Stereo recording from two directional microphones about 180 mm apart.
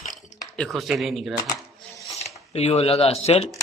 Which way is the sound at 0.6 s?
Centre (ahead or behind).